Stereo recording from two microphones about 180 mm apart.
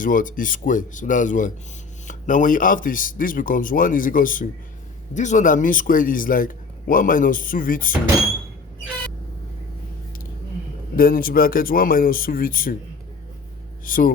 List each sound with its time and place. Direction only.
0.0 s a man's voice: 50° left (ahead or behind)
10.9 s a man's voice: 55° left (ahead or behind)
13.8 s a man's voice: 50° left (ahead or behind)